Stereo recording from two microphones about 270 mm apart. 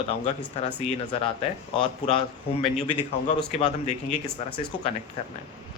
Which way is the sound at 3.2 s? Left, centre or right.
Left.